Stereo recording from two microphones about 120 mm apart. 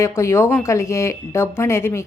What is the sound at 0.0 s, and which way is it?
Speech, 25° left (ahead or behind).